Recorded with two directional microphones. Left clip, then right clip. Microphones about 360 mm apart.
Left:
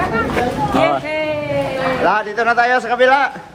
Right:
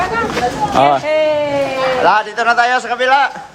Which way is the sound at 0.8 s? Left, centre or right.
Right.